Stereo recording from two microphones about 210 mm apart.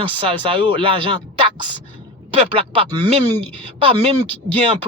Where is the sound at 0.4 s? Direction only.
25° right (ahead or behind).